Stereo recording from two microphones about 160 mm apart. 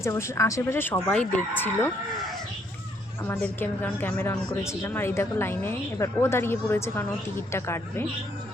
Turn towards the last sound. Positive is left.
turn(degrees=15)  # may be behind; listen again after turning